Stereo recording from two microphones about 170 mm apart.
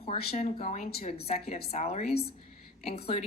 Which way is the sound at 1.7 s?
40° left (ahead or behind).